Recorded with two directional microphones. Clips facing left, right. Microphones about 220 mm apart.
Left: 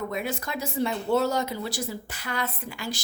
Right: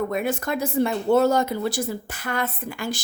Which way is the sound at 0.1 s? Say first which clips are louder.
Right 6 dB; 50° right (ahead or behind).